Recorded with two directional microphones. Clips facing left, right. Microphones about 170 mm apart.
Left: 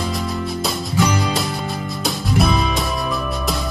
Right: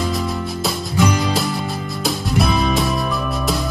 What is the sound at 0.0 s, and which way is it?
Music, centre (ahead or behind).